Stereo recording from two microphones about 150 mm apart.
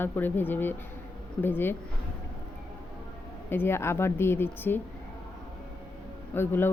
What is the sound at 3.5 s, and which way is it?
A woman's voice, 15° left (ahead or behind).